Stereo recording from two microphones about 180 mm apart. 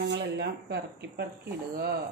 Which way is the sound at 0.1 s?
75° right (ahead or behind).